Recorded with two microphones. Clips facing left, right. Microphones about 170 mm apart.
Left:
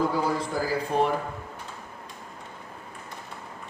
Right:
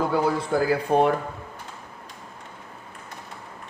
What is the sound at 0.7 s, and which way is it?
Speech, 60° right (ahead or behind).